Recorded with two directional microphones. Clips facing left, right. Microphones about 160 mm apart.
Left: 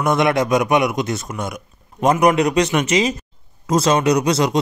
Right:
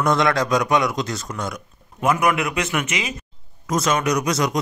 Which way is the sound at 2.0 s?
35° left (ahead or behind).